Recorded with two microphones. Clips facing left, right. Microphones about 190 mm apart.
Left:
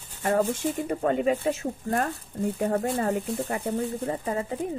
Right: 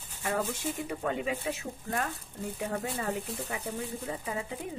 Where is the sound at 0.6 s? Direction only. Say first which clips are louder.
Left 7 dB; 45° left (ahead or behind).